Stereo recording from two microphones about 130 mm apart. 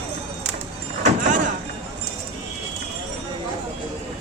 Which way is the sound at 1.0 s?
80° right.